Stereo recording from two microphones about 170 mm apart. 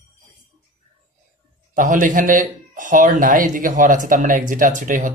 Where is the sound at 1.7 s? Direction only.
50° right (ahead or behind).